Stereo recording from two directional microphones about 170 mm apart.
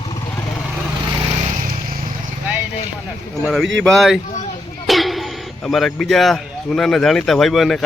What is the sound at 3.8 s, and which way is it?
A man's voice, centre (ahead or behind).